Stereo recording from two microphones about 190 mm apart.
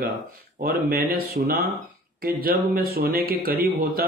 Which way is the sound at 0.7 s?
50° right (ahead or behind).